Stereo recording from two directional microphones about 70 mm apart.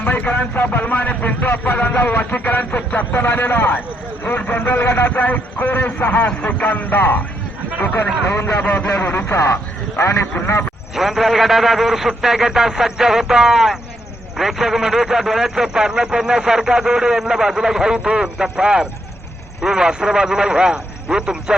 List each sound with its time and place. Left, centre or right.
0.0 s speech: left
8.6 s speech: left
10.0 s a man's voice: left
10.9 s a man's voice: centre